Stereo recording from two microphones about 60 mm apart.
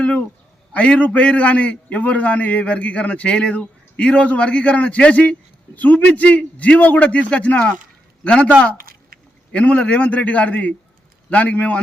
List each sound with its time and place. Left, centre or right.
0.7 s a man's voice: left
9.5 s a man's voice: left